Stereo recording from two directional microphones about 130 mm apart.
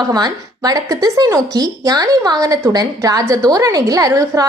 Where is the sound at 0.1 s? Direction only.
30° right (ahead or behind).